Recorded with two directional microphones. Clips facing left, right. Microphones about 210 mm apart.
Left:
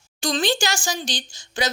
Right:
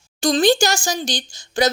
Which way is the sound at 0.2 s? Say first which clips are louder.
Right 7 dB; 40° right (ahead or behind).